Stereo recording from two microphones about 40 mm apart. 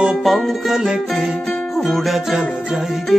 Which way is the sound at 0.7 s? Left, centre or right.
Centre.